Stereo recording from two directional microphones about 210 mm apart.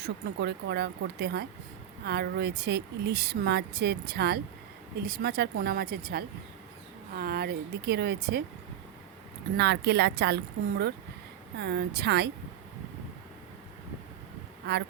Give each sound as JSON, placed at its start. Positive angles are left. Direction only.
{"t": 0.0, "sound": "speech", "side_deg": -50}
{"t": 9.6, "sound": "speech", "side_deg": -55}
{"t": 14.6, "sound": "speech", "side_deg": -50}